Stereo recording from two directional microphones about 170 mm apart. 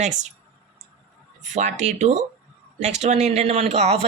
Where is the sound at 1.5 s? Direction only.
45° right (ahead or behind).